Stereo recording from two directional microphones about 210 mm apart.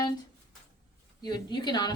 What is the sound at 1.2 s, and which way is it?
Speech, 20° left (ahead or behind).